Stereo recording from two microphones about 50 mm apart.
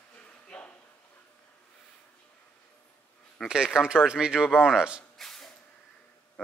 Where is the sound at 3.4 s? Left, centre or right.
Centre.